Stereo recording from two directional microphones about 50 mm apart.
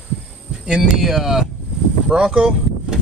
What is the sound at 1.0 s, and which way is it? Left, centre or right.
Speech, centre.